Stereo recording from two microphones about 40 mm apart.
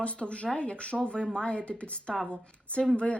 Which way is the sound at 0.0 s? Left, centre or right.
Left.